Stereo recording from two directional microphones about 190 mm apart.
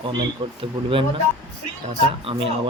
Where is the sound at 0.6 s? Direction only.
25° right (ahead or behind).